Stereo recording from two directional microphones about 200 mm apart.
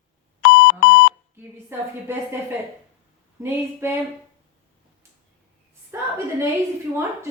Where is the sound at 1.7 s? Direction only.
10° right (ahead or behind).